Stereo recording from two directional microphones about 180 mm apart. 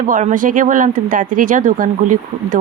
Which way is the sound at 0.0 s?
45° right (ahead or behind).